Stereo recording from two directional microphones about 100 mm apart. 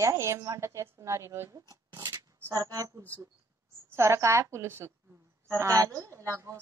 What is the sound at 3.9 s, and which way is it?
A woman's voice, 30° right (ahead or behind).